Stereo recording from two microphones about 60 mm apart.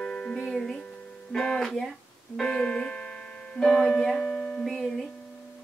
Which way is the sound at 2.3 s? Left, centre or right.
Centre.